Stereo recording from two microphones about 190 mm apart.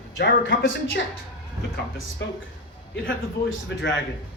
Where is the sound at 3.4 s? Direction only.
65° left (ahead or behind).